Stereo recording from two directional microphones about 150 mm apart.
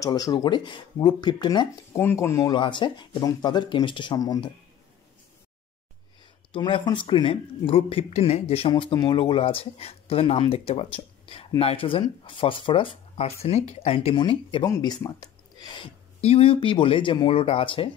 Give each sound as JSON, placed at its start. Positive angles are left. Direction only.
{"t": 0.0, "sound": "speech", "side_deg": 25}
{"t": 2.0, "sound": "speech", "side_deg": 15}
{"t": 2.5, "sound": "speech", "side_deg": 35}
{"t": 6.5, "sound": "speech", "side_deg": 30}
{"t": 14.7, "sound": "speech", "side_deg": 25}